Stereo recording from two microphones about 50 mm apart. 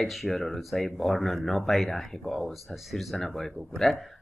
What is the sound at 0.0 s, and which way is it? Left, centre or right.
A man's voice, centre.